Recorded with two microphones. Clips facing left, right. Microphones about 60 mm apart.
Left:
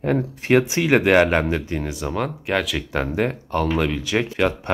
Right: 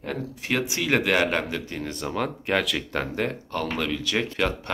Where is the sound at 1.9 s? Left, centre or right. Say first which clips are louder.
Left 3 dB; centre.